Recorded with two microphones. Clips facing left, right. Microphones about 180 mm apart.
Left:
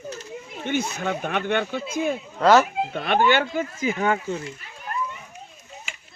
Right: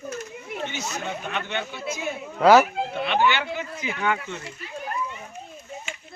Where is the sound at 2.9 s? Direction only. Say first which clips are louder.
Left 2 dB; 50° left (ahead or behind).